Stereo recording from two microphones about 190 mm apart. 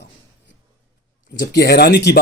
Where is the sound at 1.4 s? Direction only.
60° left (ahead or behind).